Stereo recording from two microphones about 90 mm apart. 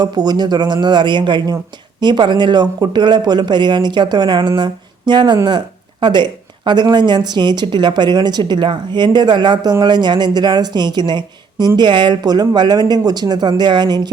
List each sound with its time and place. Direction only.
0.0 s speech: 50° right (ahead or behind)